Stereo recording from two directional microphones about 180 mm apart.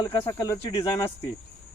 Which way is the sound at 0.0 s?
25° left (ahead or behind).